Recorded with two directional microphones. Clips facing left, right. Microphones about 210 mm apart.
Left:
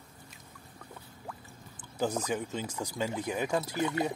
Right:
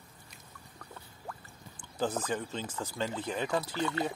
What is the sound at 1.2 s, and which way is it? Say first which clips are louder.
Speech: even; 10° left (ahead or behind).